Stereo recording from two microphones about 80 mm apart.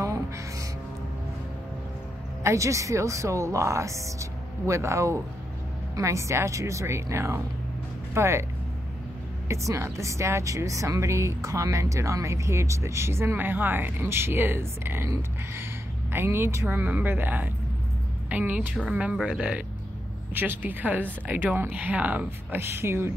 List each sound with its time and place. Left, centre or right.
0.0 s music: right
2.4 s speech: right
9.5 s speech: right
16.1 s speech: right
16.6 s speech: right
20.3 s speech: right
22.6 s speech: right